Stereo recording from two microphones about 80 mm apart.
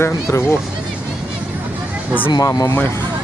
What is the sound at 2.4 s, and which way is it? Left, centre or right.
Speech, left.